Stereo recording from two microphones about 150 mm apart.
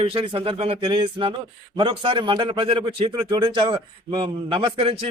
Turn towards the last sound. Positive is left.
turn(degrees=-35)  # may be behind; listen again after turning